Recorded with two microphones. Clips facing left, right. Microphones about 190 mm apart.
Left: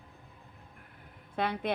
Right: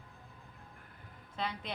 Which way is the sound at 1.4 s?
55° left (ahead or behind).